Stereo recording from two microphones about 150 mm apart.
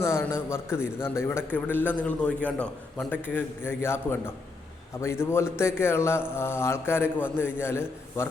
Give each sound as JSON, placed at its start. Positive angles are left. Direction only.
{"t": 0.0, "sound": "a man's voice", "side_deg": 15}
{"t": 5.2, "sound": "a man's voice", "side_deg": 15}